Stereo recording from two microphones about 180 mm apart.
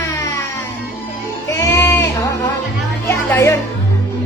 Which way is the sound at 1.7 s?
15° left (ahead or behind).